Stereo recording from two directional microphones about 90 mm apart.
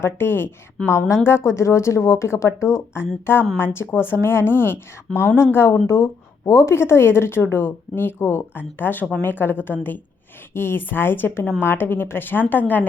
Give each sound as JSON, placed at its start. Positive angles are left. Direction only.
{"t": 0.0, "sound": "a woman's voice", "side_deg": 25}